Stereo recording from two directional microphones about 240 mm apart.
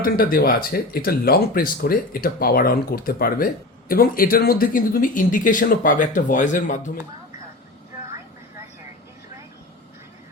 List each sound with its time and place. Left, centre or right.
0.0 s speech: left